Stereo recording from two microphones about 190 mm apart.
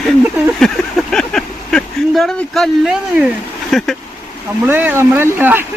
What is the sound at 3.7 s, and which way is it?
Speech, centre (ahead or behind).